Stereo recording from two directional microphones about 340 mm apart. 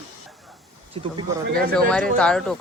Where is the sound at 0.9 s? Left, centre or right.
Centre.